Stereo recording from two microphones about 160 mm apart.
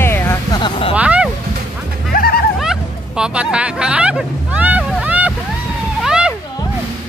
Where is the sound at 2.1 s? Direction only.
70° left (ahead or behind).